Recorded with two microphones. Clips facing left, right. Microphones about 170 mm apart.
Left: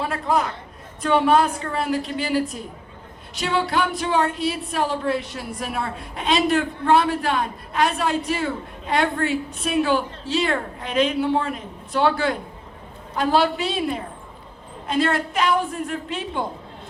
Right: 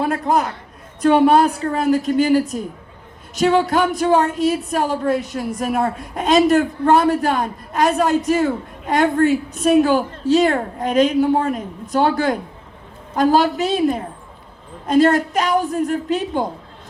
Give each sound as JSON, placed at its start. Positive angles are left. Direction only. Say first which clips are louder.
{"t": 0.0, "sound": "a woman's voice", "louder": "right 4 dB", "side_deg": -45}